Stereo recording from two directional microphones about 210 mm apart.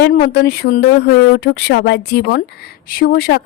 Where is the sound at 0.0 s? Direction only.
45° left (ahead or behind).